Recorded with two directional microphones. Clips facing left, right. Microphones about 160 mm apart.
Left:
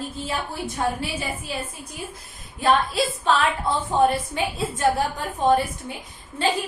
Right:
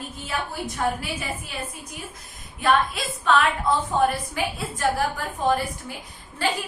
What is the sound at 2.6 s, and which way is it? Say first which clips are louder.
A woman's voice: left 2 dB; 30° left (ahead or behind).